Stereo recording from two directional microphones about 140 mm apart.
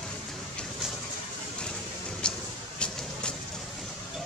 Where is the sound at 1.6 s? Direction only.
5° left (ahead or behind).